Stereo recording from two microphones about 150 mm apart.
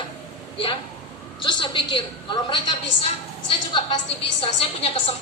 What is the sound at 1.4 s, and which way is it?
A woman's voice, 30° left (ahead or behind).